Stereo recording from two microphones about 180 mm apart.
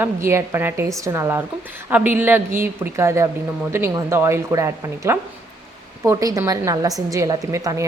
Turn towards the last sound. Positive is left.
turn(degrees=-20)  # may be behind; listen again after turning